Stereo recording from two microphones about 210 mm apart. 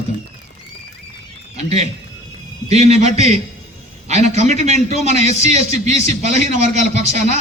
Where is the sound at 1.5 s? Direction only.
30° right (ahead or behind).